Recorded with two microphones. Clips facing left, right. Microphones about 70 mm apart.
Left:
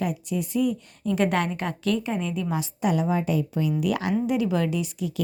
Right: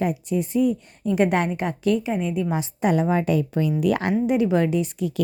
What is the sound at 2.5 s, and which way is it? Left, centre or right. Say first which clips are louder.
Speech: right 2 dB; right.